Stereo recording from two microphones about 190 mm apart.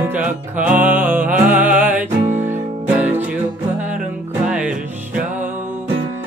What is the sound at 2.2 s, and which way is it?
Music, 40° right (ahead or behind).